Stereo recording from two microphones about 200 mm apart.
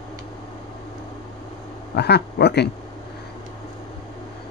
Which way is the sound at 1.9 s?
55° left (ahead or behind).